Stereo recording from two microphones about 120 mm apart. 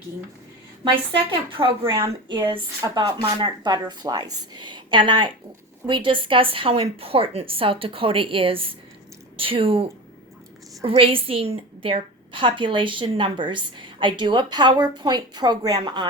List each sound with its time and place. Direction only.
1.1 s a woman's voice: 45° right (ahead or behind)